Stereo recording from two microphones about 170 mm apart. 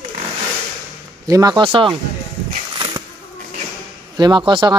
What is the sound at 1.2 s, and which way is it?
Speech, 20° right (ahead or behind).